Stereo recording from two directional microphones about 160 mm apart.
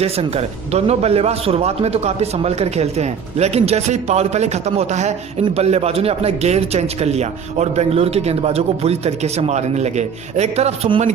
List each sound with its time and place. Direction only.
0.0 s a man's voice: 40° right (ahead or behind)